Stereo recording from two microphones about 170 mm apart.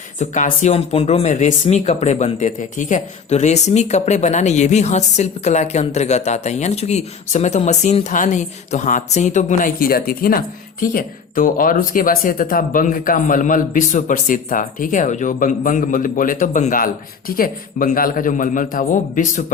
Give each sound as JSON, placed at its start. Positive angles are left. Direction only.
{"t": 0.2, "sound": "speech", "side_deg": 45}